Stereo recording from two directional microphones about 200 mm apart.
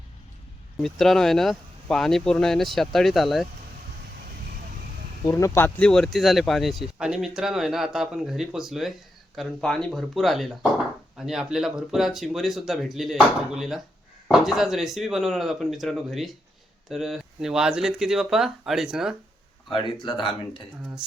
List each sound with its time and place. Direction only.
0.8 s speech: centre (ahead or behind)
5.2 s speech: 15° left (ahead or behind); by 19.1 s centre (ahead or behind)
19.7 s speech: 25° left (ahead or behind)